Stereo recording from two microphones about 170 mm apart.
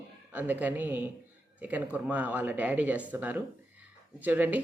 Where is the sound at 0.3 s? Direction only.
10° right (ahead or behind).